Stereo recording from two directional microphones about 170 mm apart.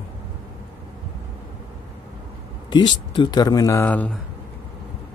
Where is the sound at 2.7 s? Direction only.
25° left (ahead or behind).